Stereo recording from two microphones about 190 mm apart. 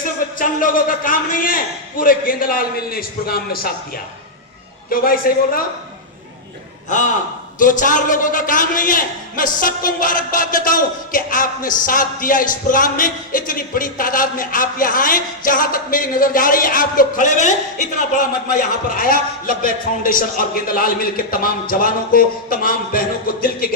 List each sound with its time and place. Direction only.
0.3 s a man's voice: 45° left (ahead or behind)
4.9 s a man's voice: 50° left (ahead or behind)
6.9 s a man's voice: 40° left (ahead or behind)
18.9 s a man's voice: 45° left (ahead or behind)